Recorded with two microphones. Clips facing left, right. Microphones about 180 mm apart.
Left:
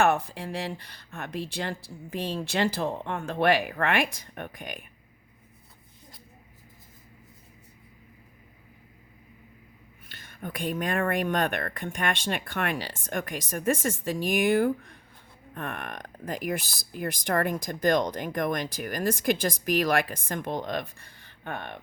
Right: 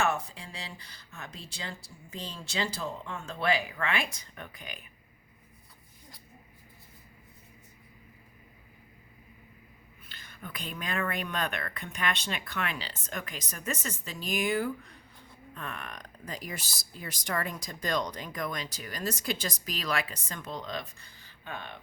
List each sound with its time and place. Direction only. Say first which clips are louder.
0.0 s speech: left 6 dB; 60° left (ahead or behind)
10.3 s speech: left 10 dB; 50° left (ahead or behind)